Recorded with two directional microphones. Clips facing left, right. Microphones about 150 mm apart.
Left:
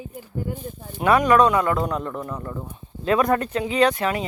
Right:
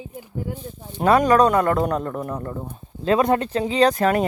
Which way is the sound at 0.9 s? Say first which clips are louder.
Right 1 dB; 35° right (ahead or behind).